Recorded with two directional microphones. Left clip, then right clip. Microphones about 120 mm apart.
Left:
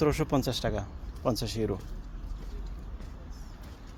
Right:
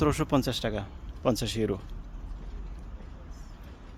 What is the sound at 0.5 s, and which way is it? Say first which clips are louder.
Speech: even; 90° right.